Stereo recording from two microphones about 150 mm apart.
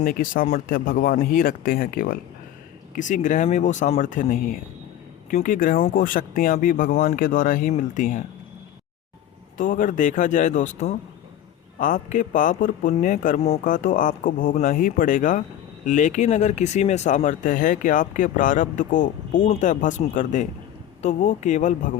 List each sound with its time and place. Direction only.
0.0 s speech: 70° left (ahead or behind)
2.9 s a man's voice: 55° left (ahead or behind)
9.6 s a man's voice: 60° left (ahead or behind)
17.2 s a man's voice: 60° left (ahead or behind)